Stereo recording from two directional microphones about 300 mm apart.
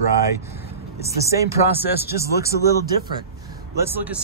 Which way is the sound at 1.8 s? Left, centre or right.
Centre.